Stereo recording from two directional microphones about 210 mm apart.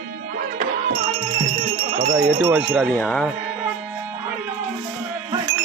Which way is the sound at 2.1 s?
10° right (ahead or behind).